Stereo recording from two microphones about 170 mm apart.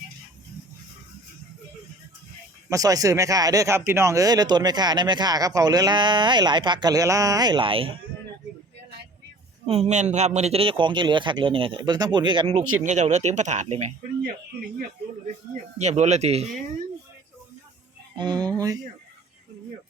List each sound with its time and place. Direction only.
2.6 s speech: 20° right (ahead or behind)
9.6 s speech: 40° right (ahead or behind)
12.5 s speech: 45° right (ahead or behind)
15.5 s speech: 40° right (ahead or behind)
18.2 s speech: 25° right (ahead or behind)